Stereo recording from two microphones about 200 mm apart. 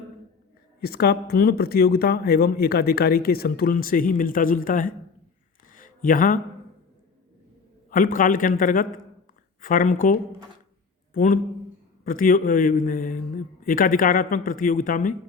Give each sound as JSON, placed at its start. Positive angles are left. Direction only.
{"t": 0.8, "sound": "speech", "side_deg": 50}
{"t": 5.7, "sound": "a sound", "side_deg": 45}
{"t": 7.9, "sound": "a man's voice", "side_deg": 45}